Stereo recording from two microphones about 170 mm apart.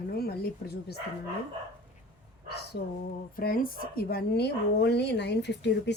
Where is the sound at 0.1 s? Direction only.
65° left (ahead or behind).